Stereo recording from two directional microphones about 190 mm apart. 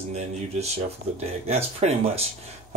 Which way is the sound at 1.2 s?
35° right (ahead or behind).